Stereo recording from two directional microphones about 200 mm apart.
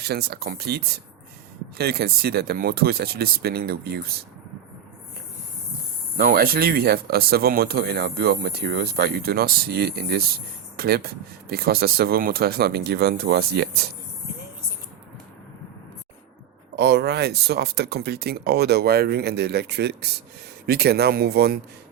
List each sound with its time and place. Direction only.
0.0 s speech: 55° right (ahead or behind)
6.1 s speech: 45° right (ahead or behind)
16.7 s speech: 55° right (ahead or behind)